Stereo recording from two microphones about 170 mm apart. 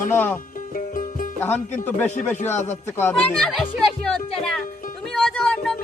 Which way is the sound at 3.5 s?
Centre (ahead or behind).